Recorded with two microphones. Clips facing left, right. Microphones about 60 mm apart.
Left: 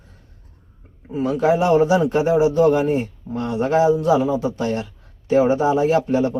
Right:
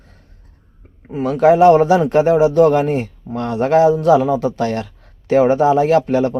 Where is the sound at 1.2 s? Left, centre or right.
Right.